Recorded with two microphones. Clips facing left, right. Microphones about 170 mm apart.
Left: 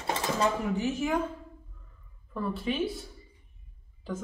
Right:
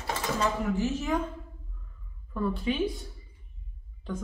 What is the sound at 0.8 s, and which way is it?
Speech, 10° left (ahead or behind).